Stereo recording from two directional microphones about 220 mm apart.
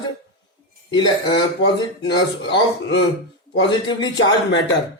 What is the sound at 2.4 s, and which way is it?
Speech, 50° left (ahead or behind).